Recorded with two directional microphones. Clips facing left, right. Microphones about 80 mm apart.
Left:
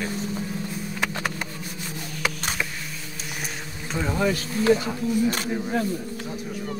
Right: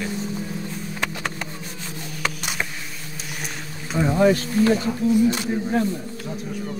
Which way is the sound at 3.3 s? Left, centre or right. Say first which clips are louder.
Even; centre.